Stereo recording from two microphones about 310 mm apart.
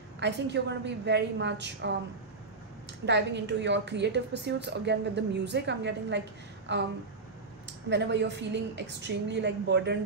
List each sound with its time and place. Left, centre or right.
0.2 s a woman's voice: right
3.1 s a woman's voice: right